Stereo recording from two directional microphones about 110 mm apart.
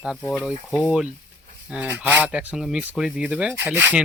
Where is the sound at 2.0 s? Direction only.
15° right (ahead or behind).